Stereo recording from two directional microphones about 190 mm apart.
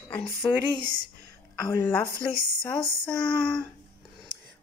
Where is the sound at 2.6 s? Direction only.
10° left (ahead or behind).